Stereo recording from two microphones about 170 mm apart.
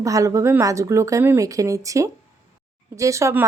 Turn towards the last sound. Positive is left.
turn(degrees=-15)  # may be behind; listen again after turning